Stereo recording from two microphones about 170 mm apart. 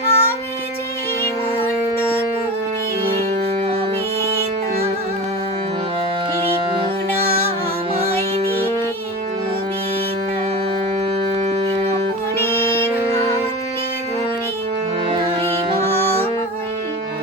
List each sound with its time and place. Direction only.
0.1 s child singing: 15° left (ahead or behind)
3.0 s music: 35° right (ahead or behind)
11.4 s music: 35° right (ahead or behind)
12.4 s music: 15° left (ahead or behind)